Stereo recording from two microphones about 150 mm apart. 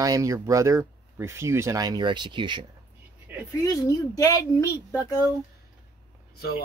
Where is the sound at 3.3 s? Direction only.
10° right (ahead or behind).